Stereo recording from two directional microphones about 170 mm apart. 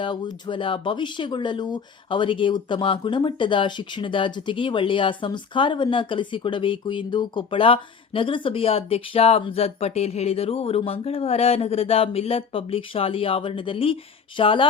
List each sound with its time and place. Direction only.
0.0 s speech: 25° left (ahead or behind)